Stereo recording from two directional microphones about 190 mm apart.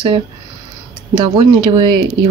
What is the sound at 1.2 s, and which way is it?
Speech, 25° right (ahead or behind).